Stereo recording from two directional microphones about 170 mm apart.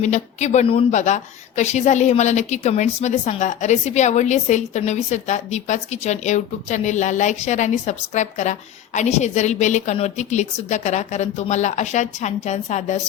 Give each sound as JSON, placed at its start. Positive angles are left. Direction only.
{"t": 0.0, "sound": "a woman's voice", "side_deg": 45}